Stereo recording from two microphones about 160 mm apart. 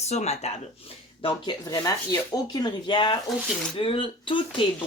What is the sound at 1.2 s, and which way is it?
Speech, 30° left (ahead or behind).